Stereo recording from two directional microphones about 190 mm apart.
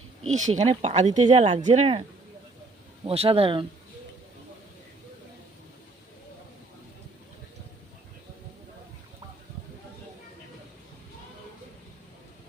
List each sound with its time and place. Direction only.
0.2 s speech: 40° right (ahead or behind)
3.1 s speech: 30° right (ahead or behind)